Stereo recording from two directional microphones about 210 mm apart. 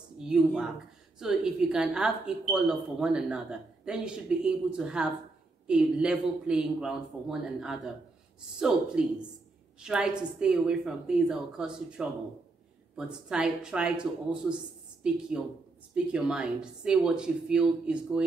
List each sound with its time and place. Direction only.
0.2 s a woman's voice: 5° right (ahead or behind)
15.0 s a woman's voice: 5° right (ahead or behind)